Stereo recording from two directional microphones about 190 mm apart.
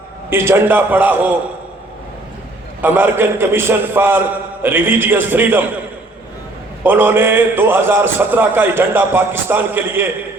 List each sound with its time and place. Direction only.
0.3 s a man's voice: 10° right (ahead or behind)
2.8 s a man's voice: 10° right (ahead or behind)
6.8 s a man's voice: 10° right (ahead or behind)